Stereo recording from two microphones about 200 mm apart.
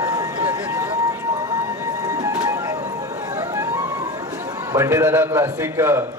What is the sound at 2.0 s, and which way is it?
Music, 15° right (ahead or behind).